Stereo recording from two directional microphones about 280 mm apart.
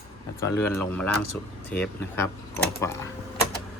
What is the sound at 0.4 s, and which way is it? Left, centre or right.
Speech, centre.